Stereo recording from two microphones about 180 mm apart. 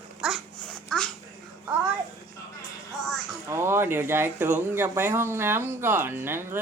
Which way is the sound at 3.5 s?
15° right (ahead or behind).